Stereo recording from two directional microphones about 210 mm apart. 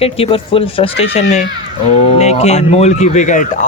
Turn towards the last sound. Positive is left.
turn(degrees=35)  # may be behind; listen again after turning